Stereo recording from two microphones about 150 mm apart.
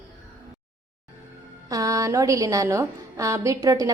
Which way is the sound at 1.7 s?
20° right (ahead or behind).